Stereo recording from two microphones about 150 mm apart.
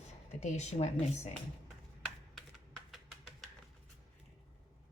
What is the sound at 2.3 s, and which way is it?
Typing, centre (ahead or behind).